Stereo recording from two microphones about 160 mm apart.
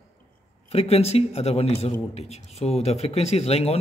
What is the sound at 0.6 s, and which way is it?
A man's voice, 40° left (ahead or behind).